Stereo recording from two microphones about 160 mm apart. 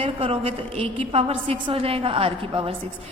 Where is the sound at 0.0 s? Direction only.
35° right (ahead or behind).